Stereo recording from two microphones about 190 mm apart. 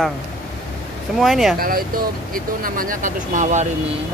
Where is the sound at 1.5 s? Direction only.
50° right (ahead or behind).